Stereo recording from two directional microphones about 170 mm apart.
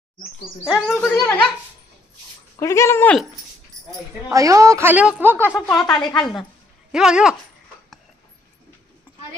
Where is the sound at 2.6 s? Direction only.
15° left (ahead or behind).